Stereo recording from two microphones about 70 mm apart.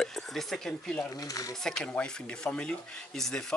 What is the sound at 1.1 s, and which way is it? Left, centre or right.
Speech, left.